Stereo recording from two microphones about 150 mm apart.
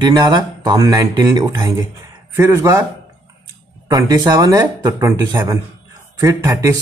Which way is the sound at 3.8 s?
25° right (ahead or behind).